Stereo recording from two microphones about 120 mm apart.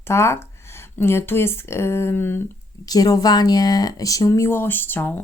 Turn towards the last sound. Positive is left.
turn(degrees=15)  # may be behind; listen again after turning